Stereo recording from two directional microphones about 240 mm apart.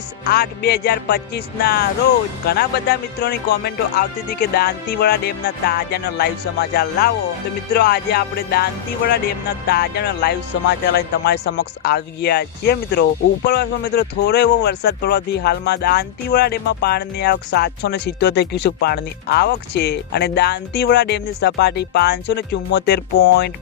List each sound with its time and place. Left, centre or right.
0.3 s music: left
2.5 s speech: left
4.3 s music: left
9.6 s speech: left